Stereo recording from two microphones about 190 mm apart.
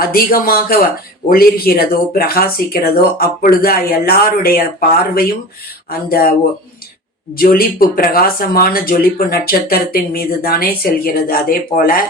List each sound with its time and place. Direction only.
0.0 s speech: 50° left (ahead or behind)
5.9 s speech: 50° left (ahead or behind)
7.3 s speech: 50° left (ahead or behind)